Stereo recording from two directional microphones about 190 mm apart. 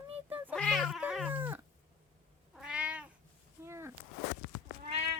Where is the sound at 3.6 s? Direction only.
15° right (ahead or behind).